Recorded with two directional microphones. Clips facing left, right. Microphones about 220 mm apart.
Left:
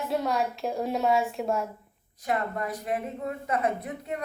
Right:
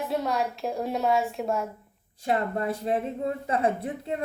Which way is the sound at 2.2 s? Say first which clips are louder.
Right 3 dB; 30° right (ahead or behind).